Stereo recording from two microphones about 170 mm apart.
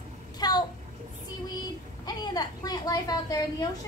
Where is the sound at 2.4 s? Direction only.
25° left (ahead or behind).